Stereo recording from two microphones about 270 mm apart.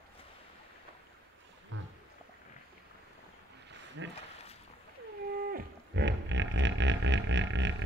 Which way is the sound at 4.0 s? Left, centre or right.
Right.